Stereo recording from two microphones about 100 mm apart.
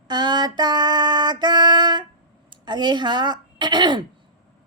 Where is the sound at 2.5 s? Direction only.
50° right (ahead or behind).